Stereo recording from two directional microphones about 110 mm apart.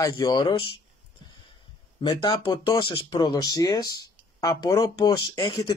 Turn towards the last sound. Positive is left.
turn(degrees=35)  # may be behind; listen again after turning